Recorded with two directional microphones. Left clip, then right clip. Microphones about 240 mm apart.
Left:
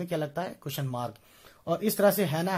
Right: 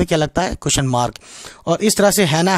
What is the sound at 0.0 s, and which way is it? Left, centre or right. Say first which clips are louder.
Speech: right 14 dB; right.